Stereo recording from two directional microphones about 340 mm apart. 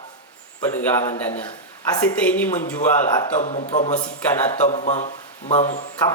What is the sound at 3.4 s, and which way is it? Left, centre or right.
A man's voice, centre.